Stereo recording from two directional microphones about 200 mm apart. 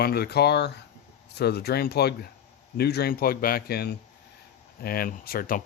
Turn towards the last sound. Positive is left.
turn(degrees=45)  # may be behind; listen again after turning